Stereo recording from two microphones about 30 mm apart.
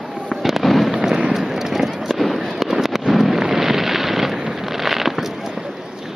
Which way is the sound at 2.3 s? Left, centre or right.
Centre.